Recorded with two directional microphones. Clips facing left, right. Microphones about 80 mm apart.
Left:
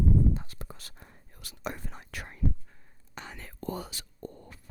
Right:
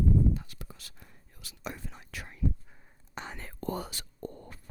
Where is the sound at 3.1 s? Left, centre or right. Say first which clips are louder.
Right 2 dB; right.